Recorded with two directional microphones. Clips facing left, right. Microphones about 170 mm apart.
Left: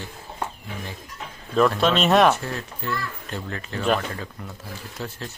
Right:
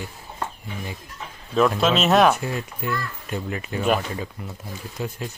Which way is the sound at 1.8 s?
Centre (ahead or behind).